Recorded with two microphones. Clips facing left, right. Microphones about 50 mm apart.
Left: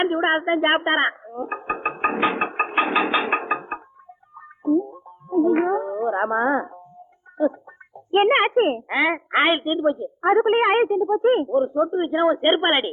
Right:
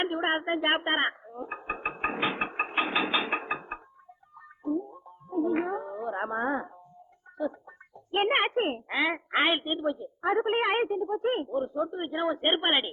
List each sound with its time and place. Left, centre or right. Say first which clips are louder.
0.0 s a sound: left 8 dB; left
4.8 s music: left 11 dB; left
7.3 s a child's voice: left 10 dB; left